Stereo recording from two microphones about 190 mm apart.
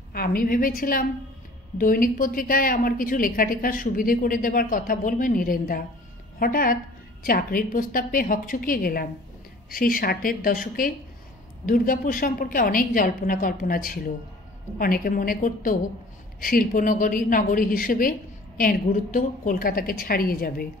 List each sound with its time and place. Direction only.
0.1 s a woman's voice: 50° left (ahead or behind)